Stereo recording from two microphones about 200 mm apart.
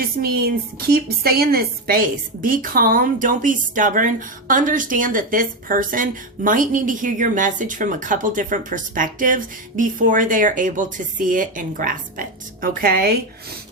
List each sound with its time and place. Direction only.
0.0 s a woman's voice: 50° right (ahead or behind)